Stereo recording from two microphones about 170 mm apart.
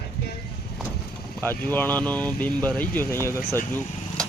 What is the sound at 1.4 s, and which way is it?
Speech, 10° left (ahead or behind).